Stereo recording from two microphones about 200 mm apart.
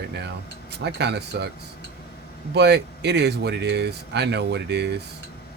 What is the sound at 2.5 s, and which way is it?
Speech, 55° right (ahead or behind).